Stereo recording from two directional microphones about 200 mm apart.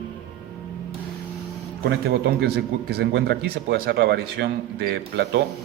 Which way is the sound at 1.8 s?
55° right (ahead or behind).